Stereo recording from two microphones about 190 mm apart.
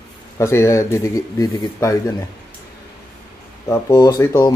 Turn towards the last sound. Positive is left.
turn(degrees=20)  # may be behind; listen again after turning